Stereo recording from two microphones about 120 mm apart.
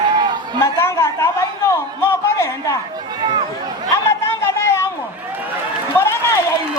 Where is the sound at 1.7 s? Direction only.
20° left (ahead or behind).